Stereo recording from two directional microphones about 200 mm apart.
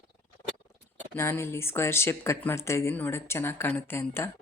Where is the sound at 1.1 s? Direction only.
10° left (ahead or behind).